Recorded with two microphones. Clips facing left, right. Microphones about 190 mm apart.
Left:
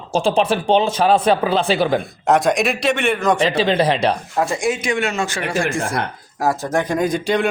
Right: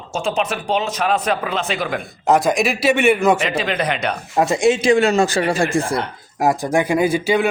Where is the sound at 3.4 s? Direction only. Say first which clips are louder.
Left 5 dB; 30° left (ahead or behind).